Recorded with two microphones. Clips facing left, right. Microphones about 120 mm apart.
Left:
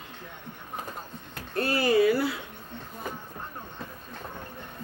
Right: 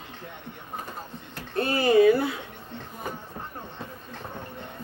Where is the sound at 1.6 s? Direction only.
20° right (ahead or behind).